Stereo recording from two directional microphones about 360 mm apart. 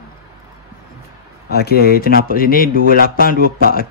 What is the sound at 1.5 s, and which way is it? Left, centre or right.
Speech, left.